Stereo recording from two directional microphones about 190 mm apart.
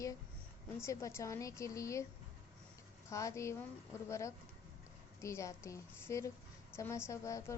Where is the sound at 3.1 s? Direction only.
15° left (ahead or behind).